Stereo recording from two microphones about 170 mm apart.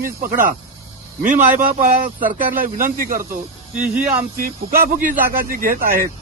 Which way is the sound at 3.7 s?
10° right (ahead or behind).